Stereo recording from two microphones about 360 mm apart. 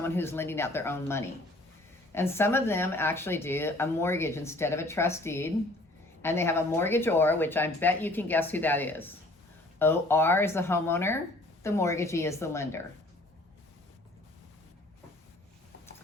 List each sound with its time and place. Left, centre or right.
0.0 s speech: centre